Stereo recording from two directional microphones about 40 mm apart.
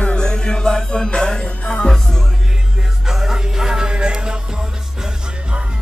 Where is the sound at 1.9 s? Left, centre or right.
Centre.